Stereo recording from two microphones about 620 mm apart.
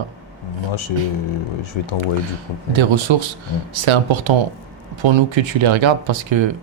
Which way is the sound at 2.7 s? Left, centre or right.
Right.